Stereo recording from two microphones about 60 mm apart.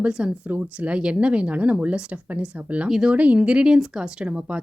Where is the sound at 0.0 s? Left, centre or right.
Centre.